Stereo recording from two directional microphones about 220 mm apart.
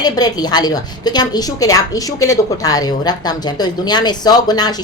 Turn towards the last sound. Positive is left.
turn(degrees=20)  # may be behind; listen again after turning